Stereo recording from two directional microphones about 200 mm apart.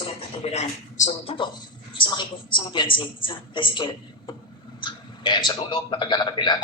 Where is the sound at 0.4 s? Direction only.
35° left (ahead or behind).